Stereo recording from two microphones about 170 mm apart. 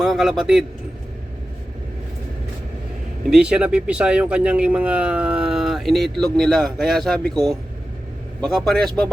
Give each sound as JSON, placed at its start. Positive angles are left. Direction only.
{"t": 0.0, "sound": "speech", "side_deg": 0}
{"t": 3.2, "sound": "speech", "side_deg": -5}